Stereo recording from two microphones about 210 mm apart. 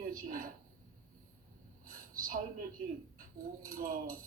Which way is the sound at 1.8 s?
40° right (ahead or behind).